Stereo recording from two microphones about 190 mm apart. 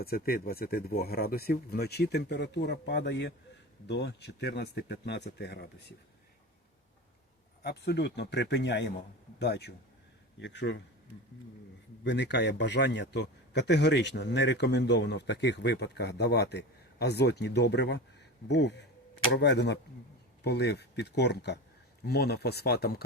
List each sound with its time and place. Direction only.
0.0 s a man's voice: 50° left (ahead or behind)
7.6 s a man's voice: 60° left (ahead or behind)
12.0 s a man's voice: 65° left (ahead or behind)